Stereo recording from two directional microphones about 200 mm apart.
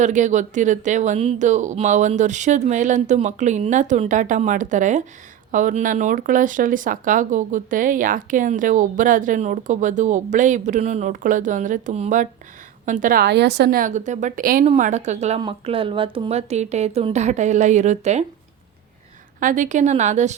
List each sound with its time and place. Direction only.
0.0 s a woman's voice: 35° right (ahead or behind)
19.4 s speech: 40° right (ahead or behind)